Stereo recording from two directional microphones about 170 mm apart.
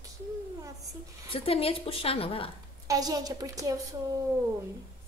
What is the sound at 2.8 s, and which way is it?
A woman's voice, 20° right (ahead or behind).